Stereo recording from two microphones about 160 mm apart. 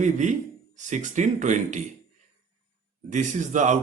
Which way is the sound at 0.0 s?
50° right (ahead or behind).